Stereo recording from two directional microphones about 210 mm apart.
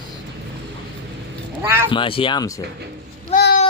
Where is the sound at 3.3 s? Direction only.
35° left (ahead or behind).